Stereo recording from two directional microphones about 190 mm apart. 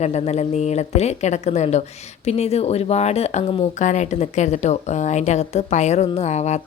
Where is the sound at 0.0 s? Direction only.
35° left (ahead or behind).